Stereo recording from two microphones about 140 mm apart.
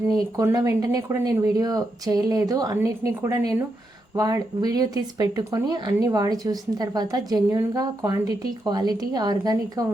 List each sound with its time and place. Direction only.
0.3 s speech: 25° right (ahead or behind)